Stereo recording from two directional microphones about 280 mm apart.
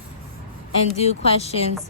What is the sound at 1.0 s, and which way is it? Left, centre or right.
Speech, left.